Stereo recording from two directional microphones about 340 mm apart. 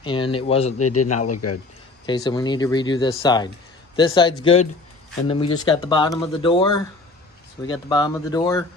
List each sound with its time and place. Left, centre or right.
0.0 s speech: centre
0.8 s a man's voice: left
2.0 s speech: centre